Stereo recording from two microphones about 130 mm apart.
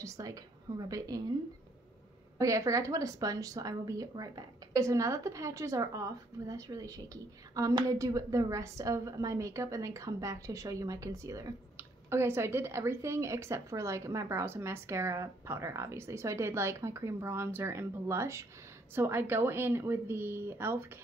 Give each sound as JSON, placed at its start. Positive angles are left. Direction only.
{"t": 0.0, "sound": "a woman's voice", "side_deg": -25}
{"t": 2.3, "sound": "a woman's voice", "side_deg": -25}